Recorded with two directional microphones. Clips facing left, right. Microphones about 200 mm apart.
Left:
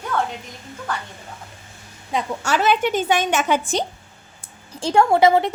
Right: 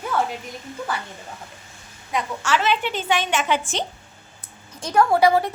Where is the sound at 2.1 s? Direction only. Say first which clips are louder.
Left 1 dB; 40° left (ahead or behind).